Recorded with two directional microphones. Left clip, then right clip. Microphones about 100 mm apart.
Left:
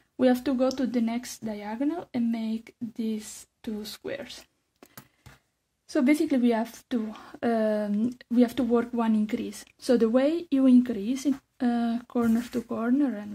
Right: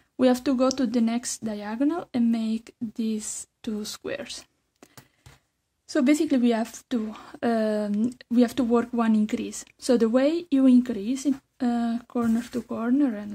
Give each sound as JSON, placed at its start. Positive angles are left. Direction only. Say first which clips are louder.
{"t": 0.2, "sound": "speech", "louder": "right 2 dB", "side_deg": -35}
{"t": 5.9, "sound": "speech", "louder": "right 2 dB", "side_deg": -20}